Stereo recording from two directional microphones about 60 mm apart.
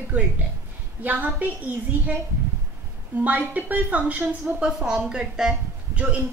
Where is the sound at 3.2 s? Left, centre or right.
Right.